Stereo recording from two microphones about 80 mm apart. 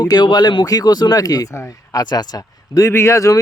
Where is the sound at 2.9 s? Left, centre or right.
Left.